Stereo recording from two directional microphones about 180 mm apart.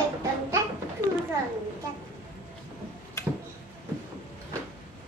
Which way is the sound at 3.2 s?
15° left (ahead or behind).